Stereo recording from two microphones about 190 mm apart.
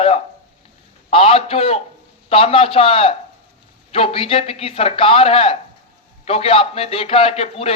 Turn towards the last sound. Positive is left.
turn(degrees=30)  # may be behind; listen again after turning